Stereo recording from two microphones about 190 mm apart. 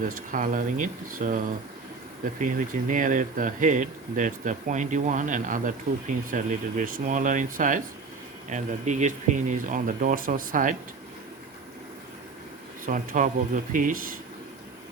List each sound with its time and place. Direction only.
0.3 s speech: 45° right (ahead or behind)
2.4 s speech: 45° right (ahead or behind)
12.8 s speech: 45° right (ahead or behind)